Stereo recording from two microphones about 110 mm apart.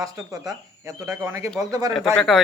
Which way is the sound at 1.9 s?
5° left (ahead or behind).